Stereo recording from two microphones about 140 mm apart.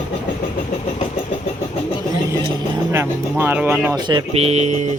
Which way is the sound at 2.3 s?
20° right (ahead or behind).